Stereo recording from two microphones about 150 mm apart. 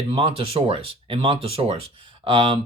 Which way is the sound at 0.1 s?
40° right (ahead or behind).